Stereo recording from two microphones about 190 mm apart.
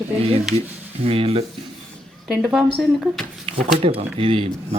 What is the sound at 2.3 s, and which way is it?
Speech, 5° right (ahead or behind).